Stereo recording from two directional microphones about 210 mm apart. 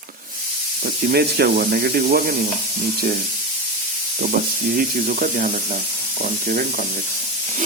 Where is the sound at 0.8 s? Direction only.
50° right (ahead or behind).